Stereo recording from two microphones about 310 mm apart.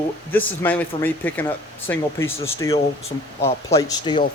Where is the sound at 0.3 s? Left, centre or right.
Centre.